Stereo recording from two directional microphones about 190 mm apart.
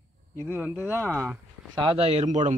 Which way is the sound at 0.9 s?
10° left (ahead or behind).